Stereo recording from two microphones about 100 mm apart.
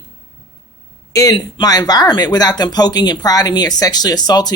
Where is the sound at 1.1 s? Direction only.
35° left (ahead or behind).